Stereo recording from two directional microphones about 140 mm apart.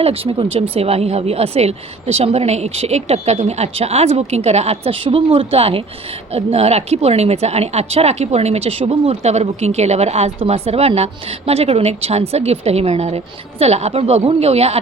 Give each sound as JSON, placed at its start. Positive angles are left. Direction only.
{"t": 0.0, "sound": "speech", "side_deg": -45}